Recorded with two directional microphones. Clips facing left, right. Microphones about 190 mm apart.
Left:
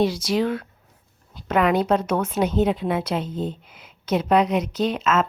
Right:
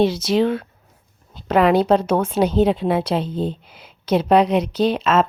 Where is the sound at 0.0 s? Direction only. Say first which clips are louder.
Right 4 dB; 25° right (ahead or behind).